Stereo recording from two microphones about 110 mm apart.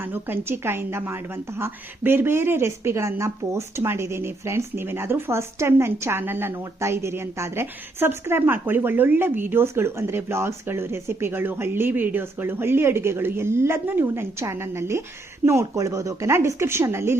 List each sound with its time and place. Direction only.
0.1 s a woman's voice: 20° right (ahead or behind)